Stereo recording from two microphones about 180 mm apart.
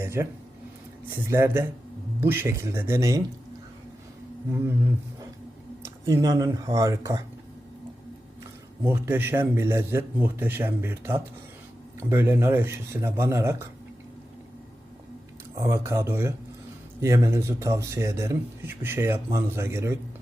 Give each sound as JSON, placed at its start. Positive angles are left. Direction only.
{"t": 0.0, "sound": "speech", "side_deg": -15}
{"t": 5.8, "sound": "speech", "side_deg": -15}
{"t": 8.8, "sound": "speech", "side_deg": -10}
{"t": 15.6, "sound": "speech", "side_deg": -15}